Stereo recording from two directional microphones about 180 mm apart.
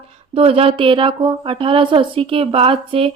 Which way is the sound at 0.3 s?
30° right (ahead or behind).